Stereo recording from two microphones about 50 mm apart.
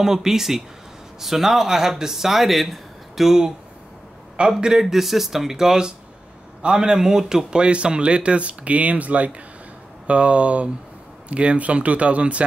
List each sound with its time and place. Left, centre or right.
0.0 s speech: centre; by 12.4 s right